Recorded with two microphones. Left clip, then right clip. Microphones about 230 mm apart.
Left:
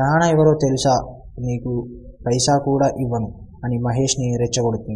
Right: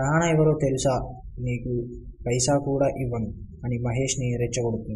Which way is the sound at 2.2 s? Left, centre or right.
Left.